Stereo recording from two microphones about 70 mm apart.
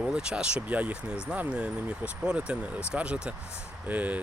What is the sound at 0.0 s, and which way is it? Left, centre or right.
Speech, centre.